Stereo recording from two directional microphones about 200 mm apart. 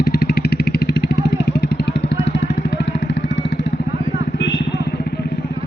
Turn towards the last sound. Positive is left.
turn(degrees=60)  # may be behind; listen again after turning